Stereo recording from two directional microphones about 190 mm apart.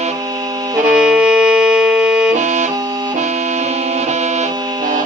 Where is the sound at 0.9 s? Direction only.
5° right (ahead or behind).